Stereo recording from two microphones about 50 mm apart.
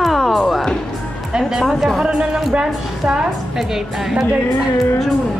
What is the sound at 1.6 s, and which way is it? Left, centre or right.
Speech, centre.